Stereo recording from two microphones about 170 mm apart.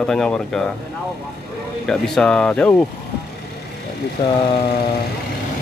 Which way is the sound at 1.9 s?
5° left (ahead or behind).